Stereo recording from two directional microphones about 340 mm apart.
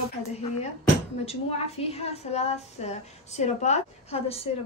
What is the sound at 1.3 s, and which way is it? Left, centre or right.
A woman's voice, centre.